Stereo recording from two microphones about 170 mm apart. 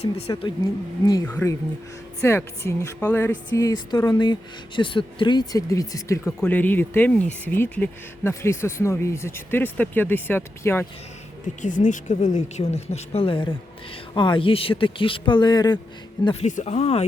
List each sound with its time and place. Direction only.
0.3 s speech: 25° left (ahead or behind); by 3.3 s 10° left (ahead or behind)
3.5 s speech: 20° left (ahead or behind)
11.6 s speech: 50° left (ahead or behind); by 15.8 s 25° left (ahead or behind)
16.2 s speech: 35° left (ahead or behind)